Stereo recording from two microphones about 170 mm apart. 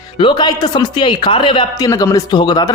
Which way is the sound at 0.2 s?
25° left (ahead or behind).